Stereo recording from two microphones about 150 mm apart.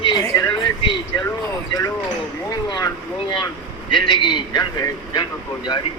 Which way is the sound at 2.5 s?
25° left (ahead or behind).